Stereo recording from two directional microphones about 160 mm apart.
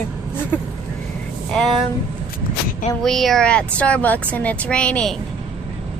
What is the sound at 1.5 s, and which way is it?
Speech, 5° left (ahead or behind).